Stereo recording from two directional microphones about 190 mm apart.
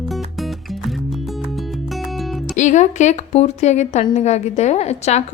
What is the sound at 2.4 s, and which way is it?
Speech, 40° left (ahead or behind).